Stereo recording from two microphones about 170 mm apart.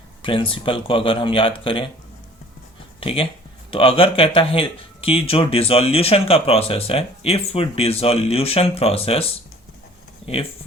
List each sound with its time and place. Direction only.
0.2 s speech: 30° left (ahead or behind)
3.0 s speech: 30° left (ahead or behind)